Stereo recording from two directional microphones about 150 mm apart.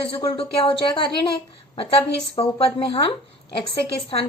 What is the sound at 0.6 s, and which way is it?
A woman's voice, 35° left (ahead or behind).